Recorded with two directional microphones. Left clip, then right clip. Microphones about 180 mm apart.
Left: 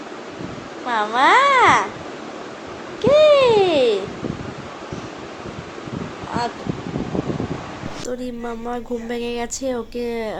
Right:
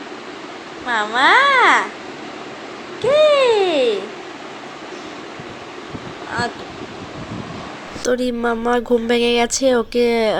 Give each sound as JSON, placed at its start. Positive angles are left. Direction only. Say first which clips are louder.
{"t": 0.9, "sound": "speech", "louder": "right 1 dB", "side_deg": 5}
{"t": 3.0, "sound": "cat", "louder": "left 1 dB", "side_deg": 5}
{"t": 6.4, "sound": "speech", "louder": "right 2 dB", "side_deg": 0}
{"t": 8.0, "sound": "speech", "louder": "right 11 dB", "side_deg": -15}